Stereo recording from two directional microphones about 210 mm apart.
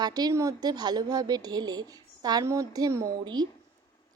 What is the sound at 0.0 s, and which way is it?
A woman's voice, 15° right (ahead or behind).